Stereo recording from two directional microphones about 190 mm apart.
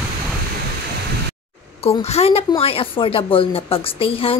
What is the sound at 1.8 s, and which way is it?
A woman's voice, 30° left (ahead or behind).